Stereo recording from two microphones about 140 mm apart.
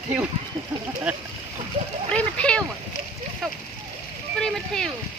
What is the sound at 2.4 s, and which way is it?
Speech, 5° left (ahead or behind).